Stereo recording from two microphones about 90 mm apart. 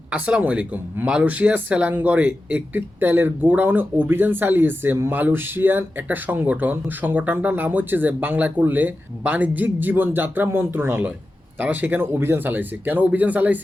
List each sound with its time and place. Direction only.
0.1 s speech: 15° right (ahead or behind)